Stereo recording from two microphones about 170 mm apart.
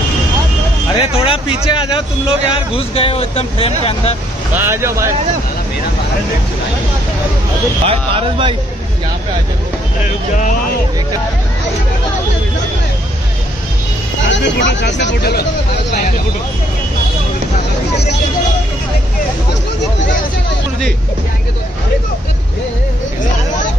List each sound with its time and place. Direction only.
0.9 s speech: 35° left (ahead or behind)
4.6 s speech: 15° right (ahead or behind)
7.8 s speech: 35° right (ahead or behind)
14.2 s speech: 90° left; by 15.4 s 70° left (ahead or behind)